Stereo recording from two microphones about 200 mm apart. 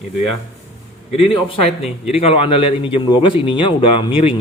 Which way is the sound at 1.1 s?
30° left (ahead or behind).